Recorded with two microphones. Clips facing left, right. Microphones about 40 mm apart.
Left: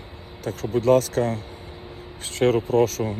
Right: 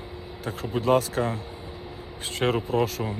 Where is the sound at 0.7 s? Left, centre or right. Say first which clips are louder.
Left 4 dB; right.